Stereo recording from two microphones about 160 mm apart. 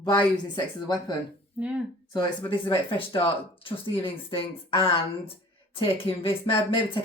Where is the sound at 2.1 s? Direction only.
30° left (ahead or behind).